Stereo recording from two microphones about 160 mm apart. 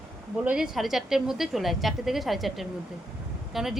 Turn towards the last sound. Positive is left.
turn(degrees=0)  # may be behind; listen again after turning